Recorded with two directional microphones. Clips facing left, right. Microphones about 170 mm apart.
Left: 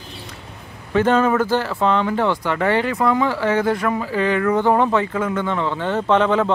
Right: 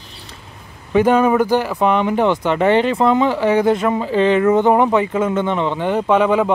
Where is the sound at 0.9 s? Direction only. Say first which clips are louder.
Right 3 dB; 15° right (ahead or behind).